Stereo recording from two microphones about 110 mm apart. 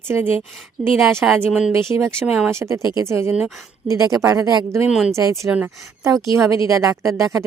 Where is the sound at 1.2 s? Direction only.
10° right (ahead or behind).